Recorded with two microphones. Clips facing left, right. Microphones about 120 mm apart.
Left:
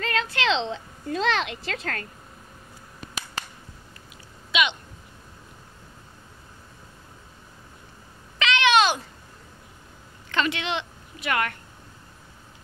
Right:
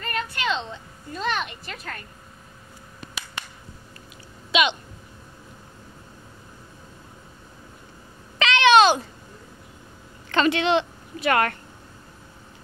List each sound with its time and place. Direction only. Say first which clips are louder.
0.0 s a woman's voice: left 2 dB; 90° left
4.5 s a sound: right 3 dB; 25° right (ahead or behind)
8.4 s babbling: right 4 dB; 35° right (ahead or behind)
10.3 s a woman's voice: right 7 dB; 35° right (ahead or behind)